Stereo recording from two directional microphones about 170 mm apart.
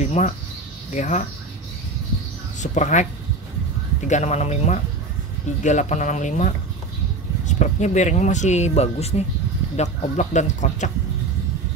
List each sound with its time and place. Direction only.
0.0 s music: 45° left (ahead or behind)
0.9 s speech: 45° left (ahead or behind)
2.6 s speech: 45° left (ahead or behind)
4.1 s speech: 40° left (ahead or behind)